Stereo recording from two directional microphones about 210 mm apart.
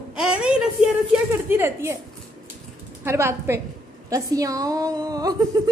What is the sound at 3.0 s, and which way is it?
Speech, 10° right (ahead or behind).